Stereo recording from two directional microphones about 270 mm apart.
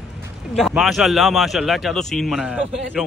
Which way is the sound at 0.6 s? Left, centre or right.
Centre.